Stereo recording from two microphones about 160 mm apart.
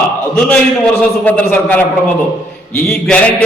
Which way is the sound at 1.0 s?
10° left (ahead or behind).